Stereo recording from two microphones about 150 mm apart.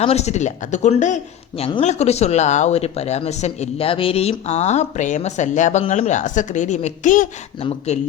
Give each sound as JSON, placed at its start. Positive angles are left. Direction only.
{"t": 0.0, "sound": "a man's voice", "side_deg": 45}
{"t": 7.6, "sound": "speech", "side_deg": 40}